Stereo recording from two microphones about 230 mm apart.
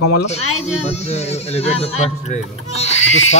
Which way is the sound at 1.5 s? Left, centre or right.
Left.